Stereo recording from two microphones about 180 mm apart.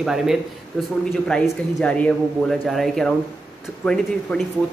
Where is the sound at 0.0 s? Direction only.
Centre (ahead or behind).